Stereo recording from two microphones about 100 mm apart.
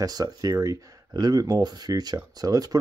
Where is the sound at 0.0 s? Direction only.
40° right (ahead or behind).